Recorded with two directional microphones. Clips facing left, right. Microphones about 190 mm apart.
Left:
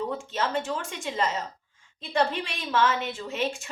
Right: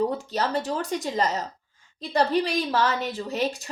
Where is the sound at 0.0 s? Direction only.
35° right (ahead or behind).